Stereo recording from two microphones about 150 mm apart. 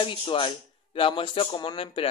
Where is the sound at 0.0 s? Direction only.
35° left (ahead or behind).